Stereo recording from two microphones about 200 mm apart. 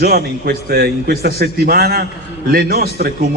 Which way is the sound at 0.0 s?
50° right (ahead or behind).